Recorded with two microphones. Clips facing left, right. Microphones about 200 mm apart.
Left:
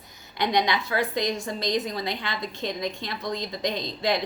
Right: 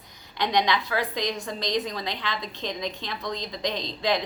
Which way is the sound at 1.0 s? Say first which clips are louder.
Left 2 dB; 45° left (ahead or behind).